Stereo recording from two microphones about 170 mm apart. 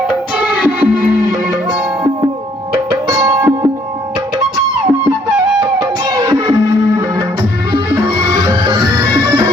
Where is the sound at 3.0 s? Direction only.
20° right (ahead or behind).